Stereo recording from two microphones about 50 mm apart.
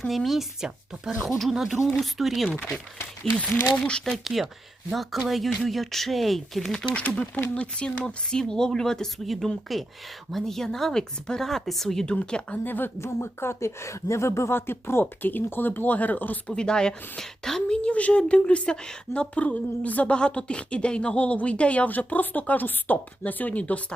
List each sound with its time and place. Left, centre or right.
0.1 s speech: centre
0.6 s speech: centre
2.5 s speech: centre
4.2 s speech: centre
6.7 s speech: centre
7.0 s speech: left
9.2 s speech: centre
12.0 s speech: centre
12.6 s speech: left
13.0 s speech: left
15.2 s speech: left
16.5 s speech: centre
17.8 s speech: left